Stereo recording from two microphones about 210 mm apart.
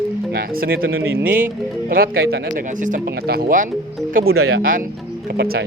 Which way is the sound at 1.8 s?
45° right (ahead or behind).